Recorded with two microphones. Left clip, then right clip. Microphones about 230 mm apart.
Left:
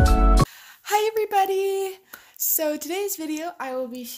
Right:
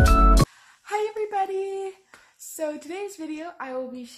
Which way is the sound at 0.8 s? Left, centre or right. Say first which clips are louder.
Left 5 dB; left.